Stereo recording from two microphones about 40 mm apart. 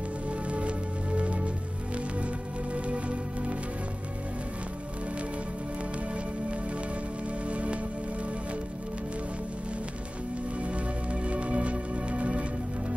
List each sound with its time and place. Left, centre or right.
0.5 s music: right
2.7 s music: right
7.4 s music: right
11.2 s music: right